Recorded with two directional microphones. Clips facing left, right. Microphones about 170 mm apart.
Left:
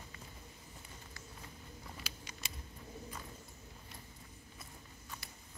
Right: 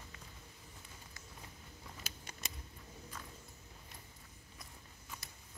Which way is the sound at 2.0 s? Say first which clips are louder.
Even; 45° right (ahead or behind).